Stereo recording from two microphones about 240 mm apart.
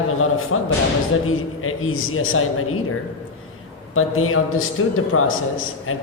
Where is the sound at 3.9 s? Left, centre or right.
Left.